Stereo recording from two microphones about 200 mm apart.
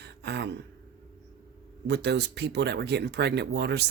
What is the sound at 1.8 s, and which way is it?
Speech, 60° right (ahead or behind).